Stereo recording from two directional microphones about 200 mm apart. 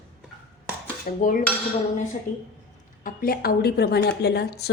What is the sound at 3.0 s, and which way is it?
Speech, 45° left (ahead or behind).